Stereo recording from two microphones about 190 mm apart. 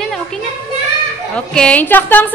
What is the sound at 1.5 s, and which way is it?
Speech, 5° left (ahead or behind).